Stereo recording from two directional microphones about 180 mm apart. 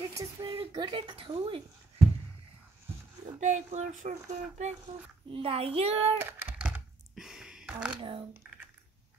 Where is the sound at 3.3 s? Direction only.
40° right (ahead or behind).